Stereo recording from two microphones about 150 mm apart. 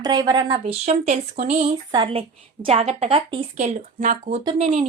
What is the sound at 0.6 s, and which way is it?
Speech, 45° right (ahead or behind).